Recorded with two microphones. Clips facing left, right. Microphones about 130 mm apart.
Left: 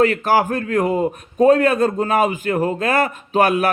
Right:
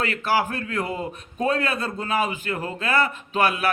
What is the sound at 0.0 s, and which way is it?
A man's voice, 45° left (ahead or behind).